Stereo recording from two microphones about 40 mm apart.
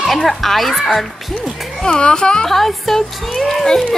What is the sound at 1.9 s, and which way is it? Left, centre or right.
Speech, left.